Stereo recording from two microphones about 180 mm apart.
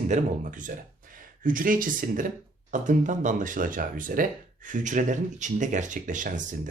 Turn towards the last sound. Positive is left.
turn(degrees=-45)  # may be behind; listen again after turning